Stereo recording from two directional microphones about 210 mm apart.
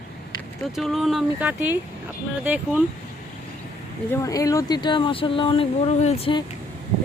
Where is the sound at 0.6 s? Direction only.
Centre (ahead or behind).